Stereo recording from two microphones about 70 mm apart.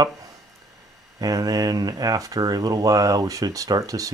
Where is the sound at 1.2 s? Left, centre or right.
Right.